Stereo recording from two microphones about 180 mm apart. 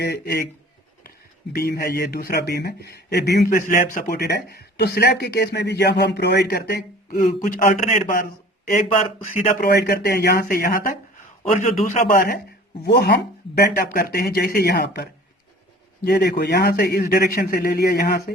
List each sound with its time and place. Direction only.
0.0 s speech: 65° left (ahead or behind)
1.5 s a man's voice: 60° left (ahead or behind)
9.7 s speech: 65° left (ahead or behind)
11.4 s a man's voice: 35° left (ahead or behind)
12.1 s a man's voice: 55° left (ahead or behind)